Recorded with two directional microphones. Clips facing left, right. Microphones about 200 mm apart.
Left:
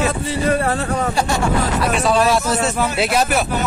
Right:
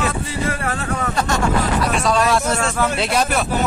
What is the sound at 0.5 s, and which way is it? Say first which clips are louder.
Speech: left 4 dB; 35° left (ahead or behind).